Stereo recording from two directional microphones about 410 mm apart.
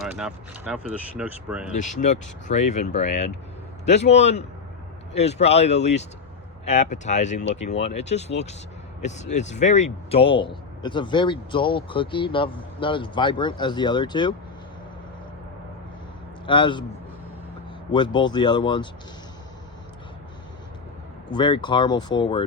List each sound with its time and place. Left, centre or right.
0.0 s speech: centre
1.7 s speech: centre
16.5 s speech: centre
17.9 s speech: centre
21.2 s speech: centre